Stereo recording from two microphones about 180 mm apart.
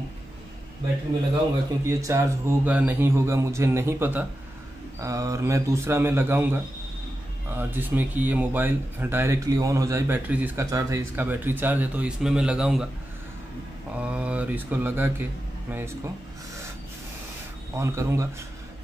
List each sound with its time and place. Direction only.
1.9 s speech: 15° right (ahead or behind)
13.9 s speech: 5° right (ahead or behind)
17.7 s speech: 15° right (ahead or behind)